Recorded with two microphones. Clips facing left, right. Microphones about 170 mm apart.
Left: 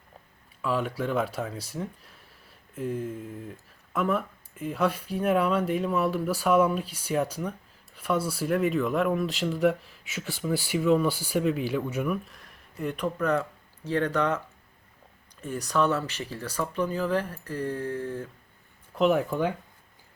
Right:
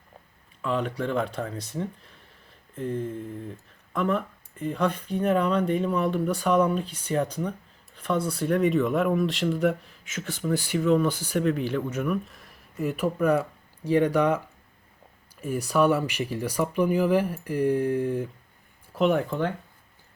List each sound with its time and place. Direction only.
0.6 s speech: 5° left (ahead or behind); by 18.3 s 15° right (ahead or behind)
18.9 s speech: centre (ahead or behind)